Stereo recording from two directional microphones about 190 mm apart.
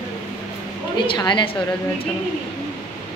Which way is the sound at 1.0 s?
25° left (ahead or behind).